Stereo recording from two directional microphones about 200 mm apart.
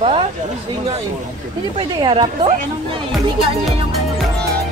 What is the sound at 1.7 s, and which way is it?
Speech, 25° right (ahead or behind).